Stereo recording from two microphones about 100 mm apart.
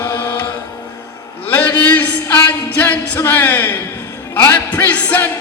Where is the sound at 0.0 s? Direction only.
30° left (ahead or behind).